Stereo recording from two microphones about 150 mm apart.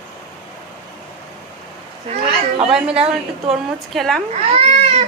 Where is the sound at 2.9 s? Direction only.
40° right (ahead or behind).